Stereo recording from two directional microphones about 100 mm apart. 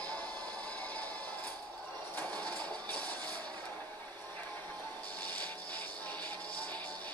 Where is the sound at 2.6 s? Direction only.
10° left (ahead or behind).